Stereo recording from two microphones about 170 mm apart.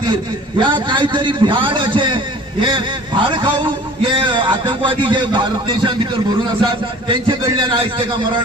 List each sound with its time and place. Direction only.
0.6 s a man's voice: 30° right (ahead or behind)
7.1 s a man's voice: 30° right (ahead or behind)